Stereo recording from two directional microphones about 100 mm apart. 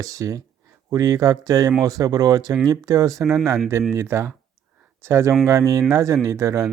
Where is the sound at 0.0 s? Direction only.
35° right (ahead or behind).